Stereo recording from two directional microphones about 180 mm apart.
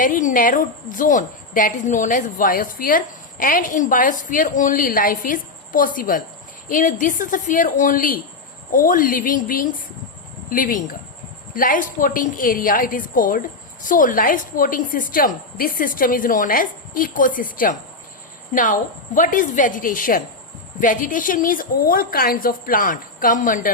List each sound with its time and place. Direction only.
0.0 s a woman's voice: 45° left (ahead or behind)